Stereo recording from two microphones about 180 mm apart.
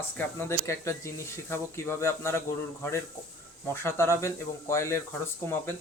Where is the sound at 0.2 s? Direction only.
10° left (ahead or behind).